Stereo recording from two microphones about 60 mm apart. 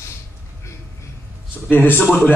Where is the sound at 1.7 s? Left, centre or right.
Left.